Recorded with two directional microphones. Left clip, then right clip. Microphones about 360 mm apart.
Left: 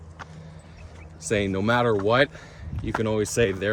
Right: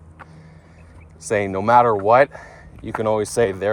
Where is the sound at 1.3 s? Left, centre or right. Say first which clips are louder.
Right 6 dB; centre.